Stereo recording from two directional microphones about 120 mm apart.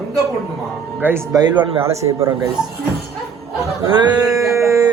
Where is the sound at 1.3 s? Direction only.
35° right (ahead or behind).